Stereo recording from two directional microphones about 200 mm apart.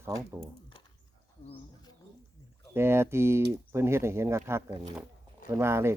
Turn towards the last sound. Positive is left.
turn(degrees=-15)  # may be behind; listen again after turning